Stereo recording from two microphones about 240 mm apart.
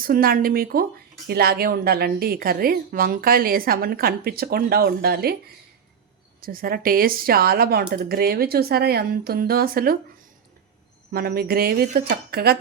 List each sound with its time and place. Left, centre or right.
0.0 s speech: right
6.4 s speech: right
11.1 s speech: right